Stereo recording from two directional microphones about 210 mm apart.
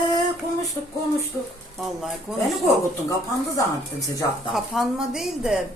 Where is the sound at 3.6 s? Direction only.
15° left (ahead or behind).